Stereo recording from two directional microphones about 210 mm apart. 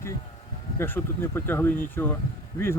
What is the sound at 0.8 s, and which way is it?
Speech, 10° left (ahead or behind).